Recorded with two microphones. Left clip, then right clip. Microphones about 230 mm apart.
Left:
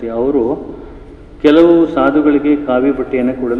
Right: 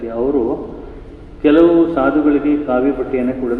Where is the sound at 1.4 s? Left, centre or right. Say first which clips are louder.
Left 2 dB; left.